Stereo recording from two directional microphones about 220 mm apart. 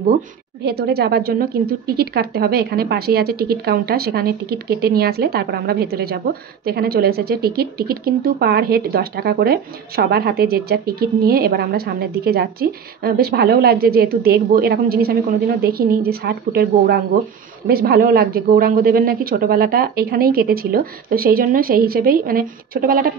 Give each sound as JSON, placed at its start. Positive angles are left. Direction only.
{"t": 0.7, "sound": "a woman's voice", "side_deg": -45}